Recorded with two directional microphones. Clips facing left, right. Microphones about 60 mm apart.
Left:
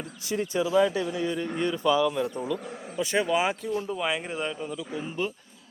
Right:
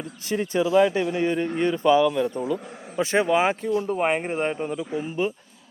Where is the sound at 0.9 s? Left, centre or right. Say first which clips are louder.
Right 5 dB; right.